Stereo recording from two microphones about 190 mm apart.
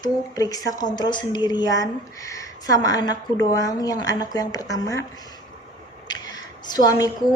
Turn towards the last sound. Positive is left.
turn(degrees=20)  # may be behind; listen again after turning